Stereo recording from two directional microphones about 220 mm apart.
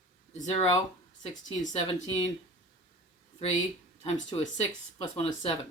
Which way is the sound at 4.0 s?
25° left (ahead or behind).